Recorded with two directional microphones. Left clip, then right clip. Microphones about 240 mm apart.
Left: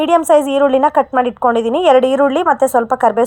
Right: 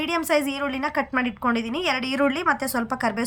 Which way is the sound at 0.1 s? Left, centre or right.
Centre.